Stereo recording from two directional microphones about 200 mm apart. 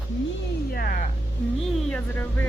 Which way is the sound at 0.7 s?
50° left (ahead or behind).